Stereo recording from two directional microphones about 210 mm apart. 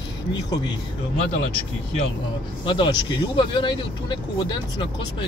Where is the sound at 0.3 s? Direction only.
20° left (ahead or behind).